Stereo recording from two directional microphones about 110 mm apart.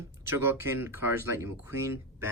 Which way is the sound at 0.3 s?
25° right (ahead or behind).